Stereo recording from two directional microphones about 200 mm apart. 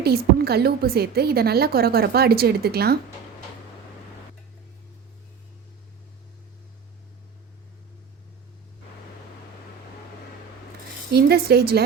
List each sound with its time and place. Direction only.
0.0 s a woman's voice: 50° right (ahead or behind)
11.1 s a woman's voice: 50° right (ahead or behind)